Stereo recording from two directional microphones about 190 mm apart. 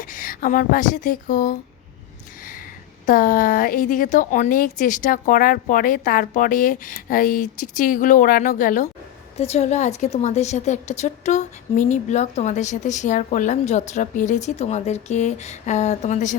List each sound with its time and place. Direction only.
0.0 s speech: 45° left (ahead or behind)
3.1 s a woman's voice: 45° left (ahead or behind)